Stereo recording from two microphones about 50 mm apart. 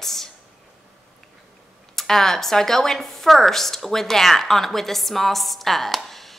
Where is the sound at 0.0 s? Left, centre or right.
Centre.